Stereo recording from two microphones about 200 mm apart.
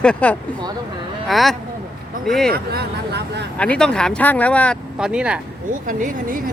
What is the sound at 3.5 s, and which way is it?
Speech, 5° left (ahead or behind).